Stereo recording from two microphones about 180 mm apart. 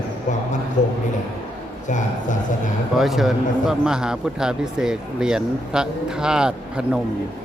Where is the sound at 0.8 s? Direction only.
45° left (ahead or behind).